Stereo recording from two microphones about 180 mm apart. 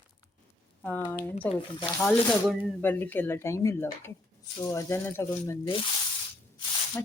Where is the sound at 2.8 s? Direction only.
10° left (ahead or behind).